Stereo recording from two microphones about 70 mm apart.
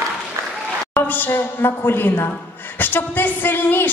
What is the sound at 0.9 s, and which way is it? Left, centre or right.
A woman's voice, left.